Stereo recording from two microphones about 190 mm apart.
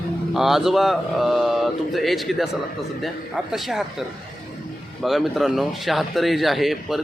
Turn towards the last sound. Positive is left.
turn(degrees=0)  # may be behind; listen again after turning